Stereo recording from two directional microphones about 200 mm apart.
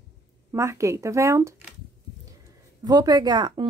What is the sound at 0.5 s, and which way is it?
Speech, 15° right (ahead or behind).